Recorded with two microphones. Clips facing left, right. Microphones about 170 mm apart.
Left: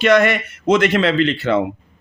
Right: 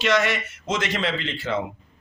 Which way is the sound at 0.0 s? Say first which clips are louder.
Left 8 dB; 55° left (ahead or behind).